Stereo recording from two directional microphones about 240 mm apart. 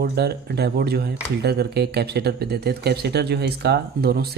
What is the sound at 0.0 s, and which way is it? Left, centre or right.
Speech, right.